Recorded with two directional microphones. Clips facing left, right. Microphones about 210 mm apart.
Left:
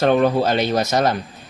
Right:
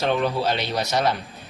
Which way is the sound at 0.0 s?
50° left (ahead or behind).